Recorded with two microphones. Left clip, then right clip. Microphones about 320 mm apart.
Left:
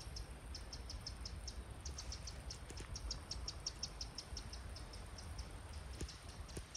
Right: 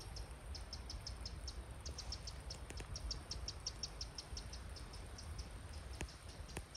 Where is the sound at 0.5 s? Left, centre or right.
Left.